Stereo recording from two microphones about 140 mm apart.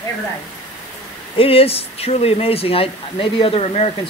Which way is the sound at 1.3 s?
40° left (ahead or behind).